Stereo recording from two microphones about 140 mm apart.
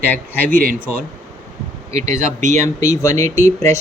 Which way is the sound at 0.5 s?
90° right.